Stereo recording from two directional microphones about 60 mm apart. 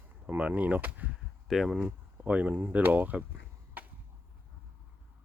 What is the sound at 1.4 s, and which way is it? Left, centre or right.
Speech, centre.